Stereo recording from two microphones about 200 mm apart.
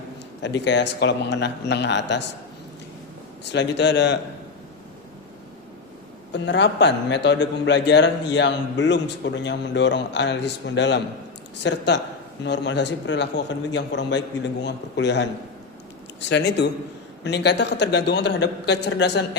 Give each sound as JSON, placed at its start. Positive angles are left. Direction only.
{"t": 0.4, "sound": "a man's voice", "side_deg": 60}
{"t": 3.5, "sound": "a man's voice", "side_deg": 60}
{"t": 6.3, "sound": "a man's voice", "side_deg": 60}
{"t": 16.3, "sound": "a man's voice", "side_deg": 60}